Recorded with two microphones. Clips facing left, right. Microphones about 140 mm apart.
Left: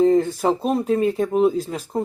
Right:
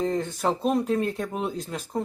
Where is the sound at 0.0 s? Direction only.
5° left (ahead or behind).